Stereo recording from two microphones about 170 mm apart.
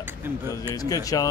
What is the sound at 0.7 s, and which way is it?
Speech, 20° left (ahead or behind).